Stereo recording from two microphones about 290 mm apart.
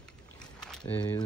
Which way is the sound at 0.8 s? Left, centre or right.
Centre.